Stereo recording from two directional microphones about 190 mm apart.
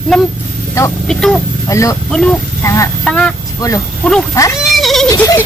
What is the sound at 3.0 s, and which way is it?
Snicker, 5° left (ahead or behind).